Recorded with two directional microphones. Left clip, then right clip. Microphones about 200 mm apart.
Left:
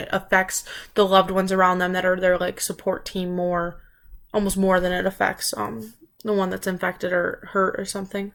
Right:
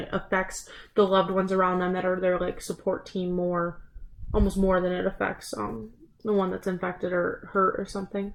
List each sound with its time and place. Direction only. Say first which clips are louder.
0.0 s speech: left 7 dB; 15° left (ahead or behind)
4.3 s speech: left 4 dB; 15° left (ahead or behind)